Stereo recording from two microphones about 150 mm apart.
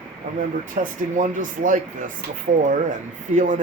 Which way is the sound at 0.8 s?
55° right (ahead or behind).